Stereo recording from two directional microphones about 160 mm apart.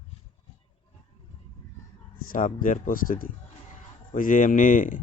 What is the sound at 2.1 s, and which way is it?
A man's voice, 60° left (ahead or behind).